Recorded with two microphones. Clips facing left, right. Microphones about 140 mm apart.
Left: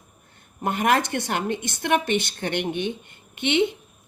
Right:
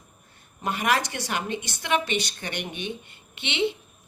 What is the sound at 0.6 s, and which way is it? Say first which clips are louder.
A woman's voice: left 4 dB; 55° left (ahead or behind).